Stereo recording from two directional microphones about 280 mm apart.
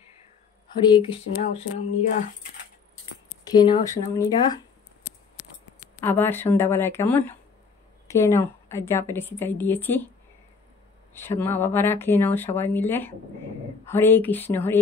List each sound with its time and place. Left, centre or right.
0.7 s a woman's voice: centre
3.4 s a woman's voice: centre
5.9 s a woman's voice: centre
11.1 s a woman's voice: centre